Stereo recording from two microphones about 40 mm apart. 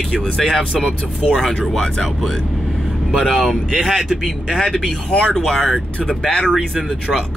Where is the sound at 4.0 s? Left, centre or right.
Centre; by 5.4 s left.